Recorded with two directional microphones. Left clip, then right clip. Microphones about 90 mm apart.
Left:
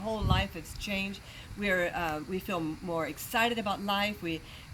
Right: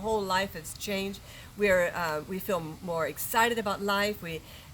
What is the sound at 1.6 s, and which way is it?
Speech, 30° right (ahead or behind).